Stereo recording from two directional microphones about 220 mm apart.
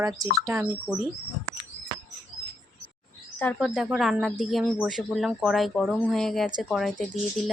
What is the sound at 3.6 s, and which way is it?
Speech, 5° right (ahead or behind).